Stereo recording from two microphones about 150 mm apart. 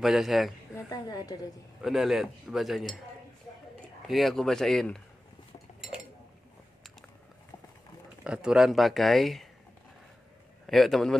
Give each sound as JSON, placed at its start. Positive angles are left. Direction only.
{"t": 0.0, "sound": "speech", "side_deg": 0}
{"t": 0.7, "sound": "a woman's voice", "side_deg": 25}
{"t": 1.8, "sound": "speech", "side_deg": 0}
{"t": 4.1, "sound": "speech", "side_deg": 0}
{"t": 8.2, "sound": "speech", "side_deg": -5}
{"t": 10.7, "sound": "speech", "side_deg": 0}